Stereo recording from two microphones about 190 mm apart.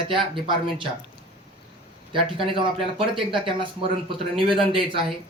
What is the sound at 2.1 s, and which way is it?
A man's voice, 25° right (ahead or behind).